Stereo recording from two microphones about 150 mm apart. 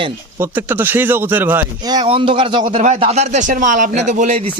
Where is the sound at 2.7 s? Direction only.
50° right (ahead or behind).